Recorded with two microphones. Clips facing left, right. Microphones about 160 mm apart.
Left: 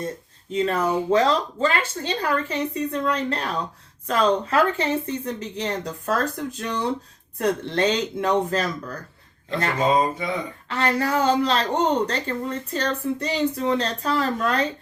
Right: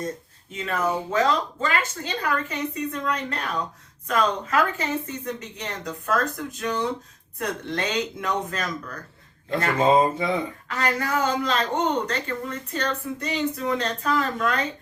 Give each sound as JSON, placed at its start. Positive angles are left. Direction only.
{"t": 0.5, "sound": "speech", "side_deg": 35}
{"t": 9.8, "sound": "speech", "side_deg": -25}
{"t": 10.7, "sound": "speech", "side_deg": 30}